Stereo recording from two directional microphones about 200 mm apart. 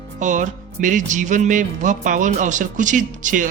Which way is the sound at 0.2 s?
40° right (ahead or behind).